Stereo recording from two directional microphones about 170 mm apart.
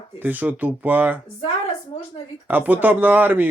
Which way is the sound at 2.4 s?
10° right (ahead or behind).